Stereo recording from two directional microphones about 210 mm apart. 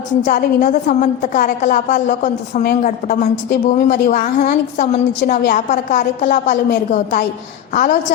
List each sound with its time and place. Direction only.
0.3 s a woman's voice: 40° left (ahead or behind)